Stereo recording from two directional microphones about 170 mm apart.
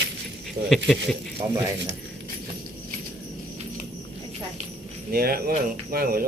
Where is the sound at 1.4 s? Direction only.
25° right (ahead or behind).